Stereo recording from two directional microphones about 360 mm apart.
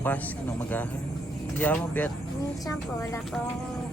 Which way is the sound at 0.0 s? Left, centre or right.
Centre.